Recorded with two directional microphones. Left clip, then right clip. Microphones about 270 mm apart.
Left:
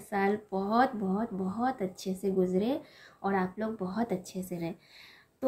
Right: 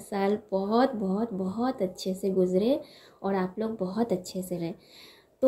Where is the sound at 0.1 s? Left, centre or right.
Centre.